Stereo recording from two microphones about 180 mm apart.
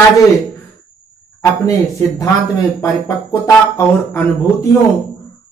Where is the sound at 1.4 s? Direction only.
20° left (ahead or behind).